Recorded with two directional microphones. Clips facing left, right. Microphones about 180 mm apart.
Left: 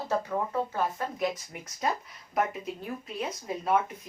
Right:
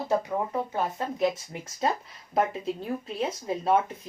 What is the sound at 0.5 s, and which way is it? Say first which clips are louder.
A woman's voice: right 1 dB; 20° right (ahead or behind).